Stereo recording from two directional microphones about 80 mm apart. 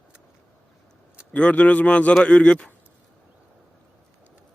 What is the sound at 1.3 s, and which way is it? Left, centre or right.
Speech, centre.